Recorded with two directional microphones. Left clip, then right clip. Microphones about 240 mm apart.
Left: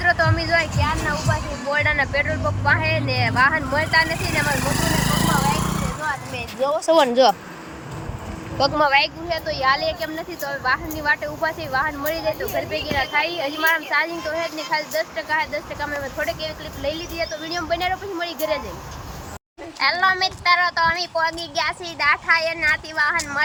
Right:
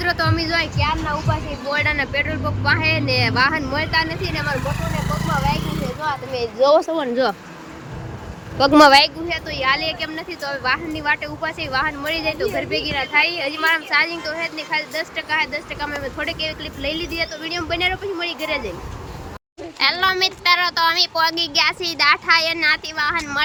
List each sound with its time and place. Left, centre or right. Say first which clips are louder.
0.0 s speech: left 1 dB; centre
4.0 s speech: left 2 dB; left
5.5 s vehicle: left 1 dB; centre
6.6 s speech: right 8 dB; right
6.9 s speech: left 5 dB; centre
8.6 s speech: right 7 dB; centre
19.8 s speech: right 1 dB; centre